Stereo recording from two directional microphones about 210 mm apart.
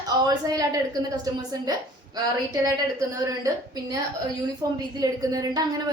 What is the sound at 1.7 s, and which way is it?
A woman's voice, 20° right (ahead or behind).